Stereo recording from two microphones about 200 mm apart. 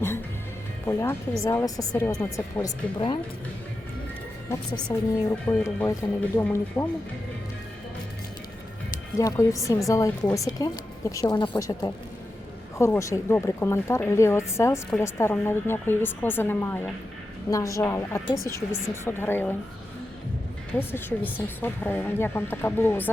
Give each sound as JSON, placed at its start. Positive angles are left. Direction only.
{"t": 0.9, "sound": "speech", "side_deg": 10}
{"t": 4.9, "sound": "speech", "side_deg": 5}
{"t": 9.1, "sound": "speech", "side_deg": 15}
{"t": 20.7, "sound": "speech", "side_deg": 10}